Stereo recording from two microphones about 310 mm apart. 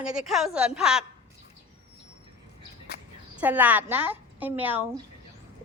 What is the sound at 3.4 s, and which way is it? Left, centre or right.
A woman's voice, centre.